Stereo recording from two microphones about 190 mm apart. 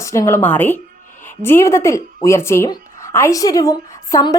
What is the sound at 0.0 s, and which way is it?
A woman's voice, 15° left (ahead or behind).